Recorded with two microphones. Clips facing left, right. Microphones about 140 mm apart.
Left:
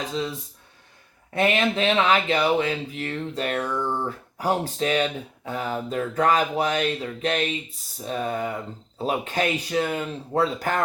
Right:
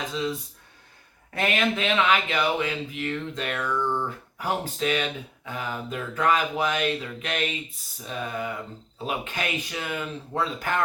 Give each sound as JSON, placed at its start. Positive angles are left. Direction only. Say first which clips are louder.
{"t": 0.1, "sound": "speech", "louder": "even", "side_deg": 35}